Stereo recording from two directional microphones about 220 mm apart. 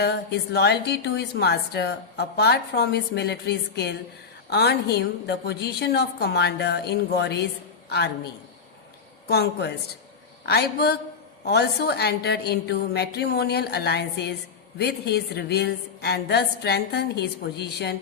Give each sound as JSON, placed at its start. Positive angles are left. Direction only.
{"t": 0.0, "sound": "a woman's voice", "side_deg": 50}
{"t": 9.2, "sound": "a woman's voice", "side_deg": 45}